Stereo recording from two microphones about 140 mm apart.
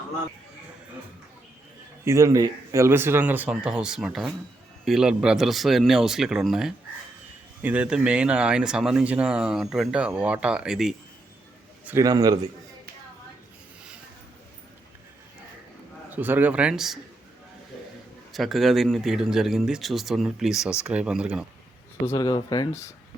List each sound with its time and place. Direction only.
2.0 s speech: 20° right (ahead or behind); by 10.9 s 5° right (ahead or behind)
12.0 s a man's voice: 25° right (ahead or behind)
16.0 s speech: 15° right (ahead or behind)
18.3 s speech: centre (ahead or behind)
22.0 s speech: 25° left (ahead or behind)